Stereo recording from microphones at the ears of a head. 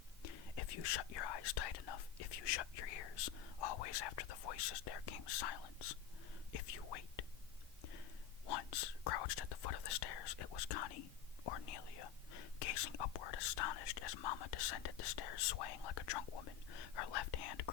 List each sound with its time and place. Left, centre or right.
0.2 s whispering: left
8.4 s speech: left